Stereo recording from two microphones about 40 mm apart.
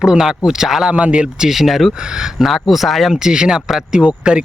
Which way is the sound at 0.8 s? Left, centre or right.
Right.